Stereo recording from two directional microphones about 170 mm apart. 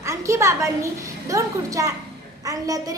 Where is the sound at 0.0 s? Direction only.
15° right (ahead or behind).